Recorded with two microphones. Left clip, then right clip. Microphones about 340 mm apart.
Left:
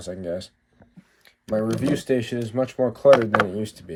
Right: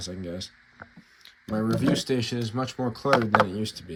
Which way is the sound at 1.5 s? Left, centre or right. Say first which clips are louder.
Left 4 dB; left.